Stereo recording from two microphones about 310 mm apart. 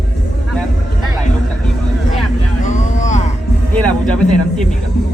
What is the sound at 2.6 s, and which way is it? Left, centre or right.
Vehicle, left.